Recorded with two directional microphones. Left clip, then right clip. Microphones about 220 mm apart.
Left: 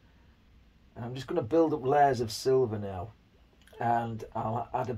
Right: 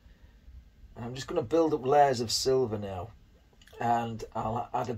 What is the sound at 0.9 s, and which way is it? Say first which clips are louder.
Speech: even; 15° left (ahead or behind).